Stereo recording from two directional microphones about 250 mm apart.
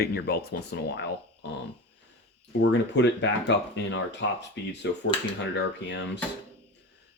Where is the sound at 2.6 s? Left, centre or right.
Left.